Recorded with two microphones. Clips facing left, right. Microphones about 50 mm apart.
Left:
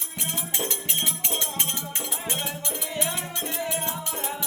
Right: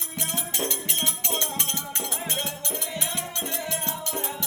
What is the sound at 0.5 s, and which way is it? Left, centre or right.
Music, centre.